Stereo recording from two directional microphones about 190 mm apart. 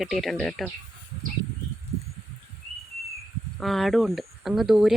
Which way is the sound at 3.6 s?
Centre (ahead or behind).